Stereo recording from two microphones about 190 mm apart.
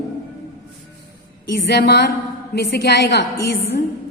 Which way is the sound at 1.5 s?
65° left (ahead or behind).